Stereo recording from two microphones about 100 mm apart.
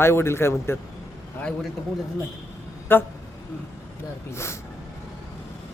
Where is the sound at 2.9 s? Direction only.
20° left (ahead or behind).